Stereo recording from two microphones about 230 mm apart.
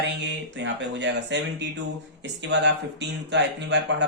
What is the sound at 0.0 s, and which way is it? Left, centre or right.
Speech, right.